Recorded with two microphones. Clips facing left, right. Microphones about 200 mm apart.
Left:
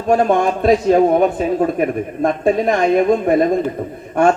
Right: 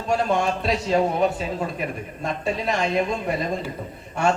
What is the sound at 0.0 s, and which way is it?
Speech, 50° left (ahead or behind).